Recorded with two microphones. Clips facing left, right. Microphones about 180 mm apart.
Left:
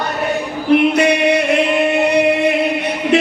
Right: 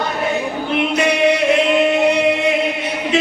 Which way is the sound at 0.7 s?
60° left (ahead or behind).